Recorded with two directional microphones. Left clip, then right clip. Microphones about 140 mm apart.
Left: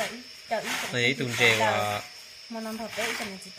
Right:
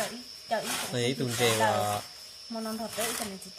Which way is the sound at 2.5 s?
5° left (ahead or behind).